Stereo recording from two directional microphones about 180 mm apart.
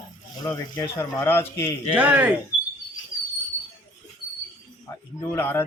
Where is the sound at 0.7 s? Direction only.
15° left (ahead or behind).